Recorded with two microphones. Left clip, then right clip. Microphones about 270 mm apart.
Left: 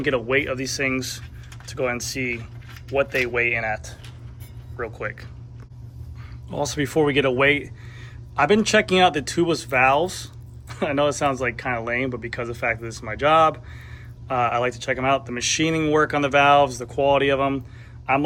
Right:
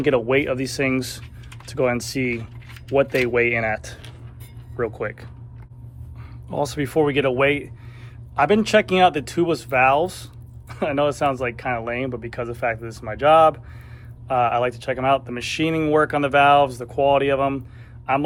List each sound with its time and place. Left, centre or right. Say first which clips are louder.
0.0 s speech: right 3 dB; centre; by 3.9 s right
4.8 s speech: right 4 dB; centre
6.5 s speech: right 1 dB; centre